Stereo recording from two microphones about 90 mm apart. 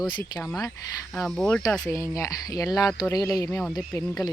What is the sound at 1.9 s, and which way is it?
Speech, 35° left (ahead or behind).